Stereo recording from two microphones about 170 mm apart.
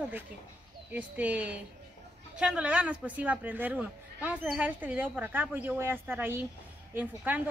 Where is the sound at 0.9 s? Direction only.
10° right (ahead or behind).